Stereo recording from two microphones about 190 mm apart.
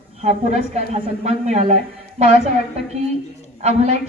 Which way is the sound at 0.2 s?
35° right (ahead or behind).